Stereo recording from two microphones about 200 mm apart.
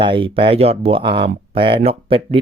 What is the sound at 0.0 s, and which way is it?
Speech, 25° right (ahead or behind).